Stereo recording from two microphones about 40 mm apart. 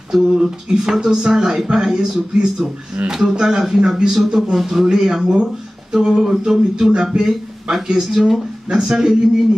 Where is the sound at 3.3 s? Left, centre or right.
Centre.